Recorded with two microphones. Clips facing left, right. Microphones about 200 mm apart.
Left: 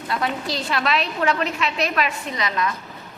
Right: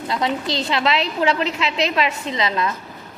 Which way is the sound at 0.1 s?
25° right (ahead or behind).